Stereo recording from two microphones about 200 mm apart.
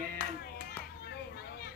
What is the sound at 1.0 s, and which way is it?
Children playing, 50° left (ahead or behind).